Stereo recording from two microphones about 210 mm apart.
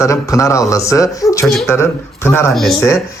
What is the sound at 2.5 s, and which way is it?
Speech, centre (ahead or behind).